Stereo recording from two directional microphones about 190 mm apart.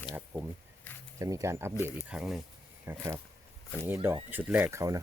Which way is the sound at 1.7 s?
15° left (ahead or behind).